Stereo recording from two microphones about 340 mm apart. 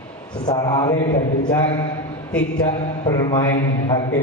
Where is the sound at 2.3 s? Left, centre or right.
Centre.